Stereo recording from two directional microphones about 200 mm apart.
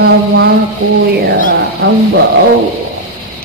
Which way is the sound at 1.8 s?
50° right (ahead or behind).